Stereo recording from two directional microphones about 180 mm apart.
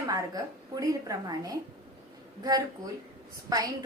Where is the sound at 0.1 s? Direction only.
20° right (ahead or behind).